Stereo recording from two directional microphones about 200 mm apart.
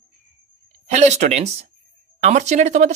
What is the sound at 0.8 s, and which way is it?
Speech, 35° right (ahead or behind).